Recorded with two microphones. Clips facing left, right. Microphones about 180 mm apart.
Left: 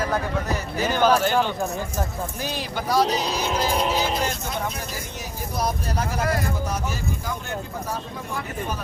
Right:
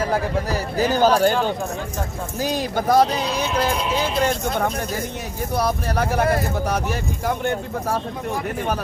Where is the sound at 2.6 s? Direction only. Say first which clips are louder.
Right 5 dB; 50° right (ahead or behind).